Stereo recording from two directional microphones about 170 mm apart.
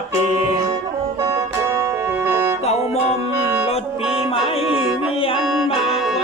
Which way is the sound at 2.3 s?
15° right (ahead or behind).